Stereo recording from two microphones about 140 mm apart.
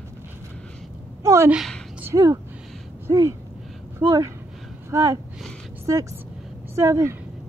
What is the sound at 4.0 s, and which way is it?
Speech, 25° right (ahead or behind).